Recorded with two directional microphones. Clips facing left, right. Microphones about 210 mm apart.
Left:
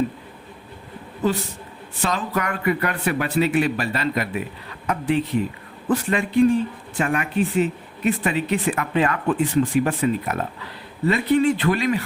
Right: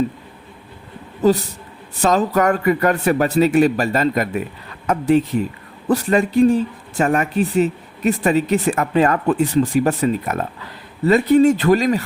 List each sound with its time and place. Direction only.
1.2 s speech: 40° right (ahead or behind)